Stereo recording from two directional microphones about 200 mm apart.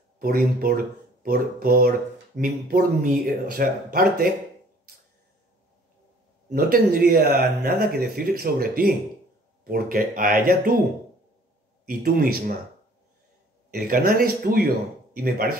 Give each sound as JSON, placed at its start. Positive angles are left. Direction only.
{"t": 0.2, "sound": "speech", "side_deg": -50}
{"t": 6.5, "sound": "speech", "side_deg": -45}
{"t": 11.8, "sound": "speech", "side_deg": -50}
{"t": 13.7, "sound": "speech", "side_deg": -45}